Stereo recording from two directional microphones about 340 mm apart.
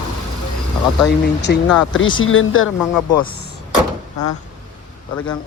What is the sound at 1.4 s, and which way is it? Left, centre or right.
Speech, left.